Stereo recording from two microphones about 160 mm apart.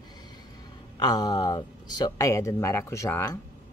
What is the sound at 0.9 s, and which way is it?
Speech, 25° left (ahead or behind).